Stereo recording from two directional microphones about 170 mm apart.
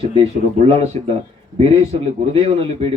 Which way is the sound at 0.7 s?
35° right (ahead or behind).